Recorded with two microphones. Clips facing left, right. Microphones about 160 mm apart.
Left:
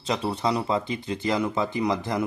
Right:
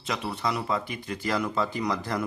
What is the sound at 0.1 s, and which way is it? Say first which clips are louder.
Speech: left 4 dB; 30° left (ahead or behind).